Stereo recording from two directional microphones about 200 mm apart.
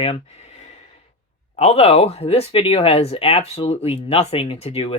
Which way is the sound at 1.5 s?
30° left (ahead or behind).